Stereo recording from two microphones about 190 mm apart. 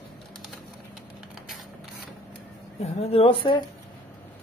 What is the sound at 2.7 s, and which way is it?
Speech, 35° left (ahead or behind).